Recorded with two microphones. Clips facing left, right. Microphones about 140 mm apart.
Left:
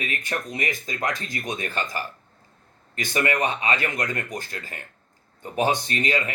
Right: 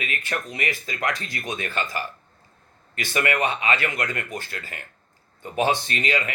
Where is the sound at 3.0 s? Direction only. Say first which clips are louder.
Even; 45° left (ahead or behind).